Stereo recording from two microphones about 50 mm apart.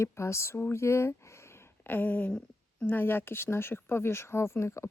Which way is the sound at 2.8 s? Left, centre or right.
Left.